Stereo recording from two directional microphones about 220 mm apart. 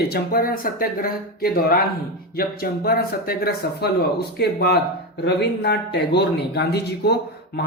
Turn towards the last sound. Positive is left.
turn(degrees=50)  # may be behind; listen again after turning